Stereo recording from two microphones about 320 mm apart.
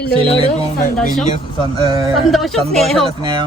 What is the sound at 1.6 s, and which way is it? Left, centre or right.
Speech, centre.